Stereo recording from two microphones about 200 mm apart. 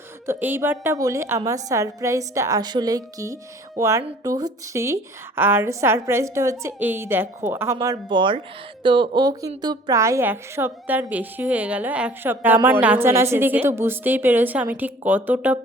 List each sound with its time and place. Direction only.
0.3 s a woman's voice: 10° right (ahead or behind)